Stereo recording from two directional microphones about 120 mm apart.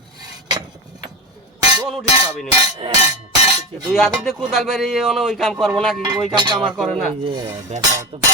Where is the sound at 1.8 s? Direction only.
Centre (ahead or behind).